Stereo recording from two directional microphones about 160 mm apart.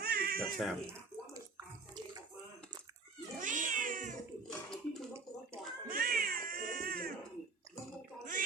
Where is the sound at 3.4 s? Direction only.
55° right (ahead or behind).